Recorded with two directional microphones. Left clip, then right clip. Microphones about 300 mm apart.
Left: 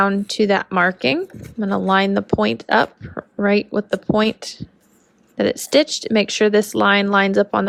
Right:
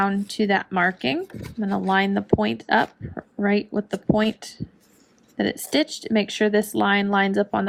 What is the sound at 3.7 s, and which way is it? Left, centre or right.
Speech, right.